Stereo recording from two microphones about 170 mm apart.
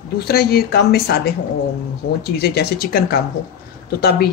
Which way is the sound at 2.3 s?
70° left (ahead or behind).